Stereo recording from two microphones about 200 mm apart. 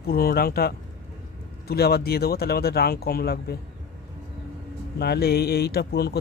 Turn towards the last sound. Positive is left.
turn(degrees=50)  # may be behind; listen again after turning